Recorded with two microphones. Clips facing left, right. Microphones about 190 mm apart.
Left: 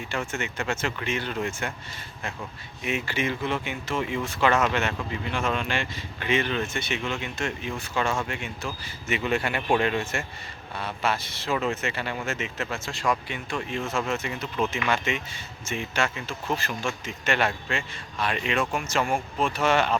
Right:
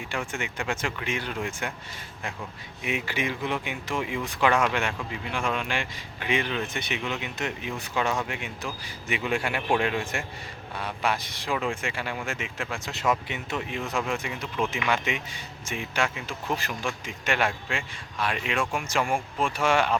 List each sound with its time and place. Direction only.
0.1 s speech: 15° right (ahead or behind)
2.8 s speech: 15° right (ahead or behind)